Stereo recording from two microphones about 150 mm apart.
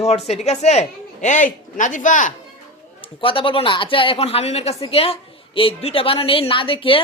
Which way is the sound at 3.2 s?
35° left (ahead or behind).